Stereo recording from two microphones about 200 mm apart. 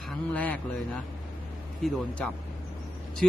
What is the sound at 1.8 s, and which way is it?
Speech, 5° left (ahead or behind).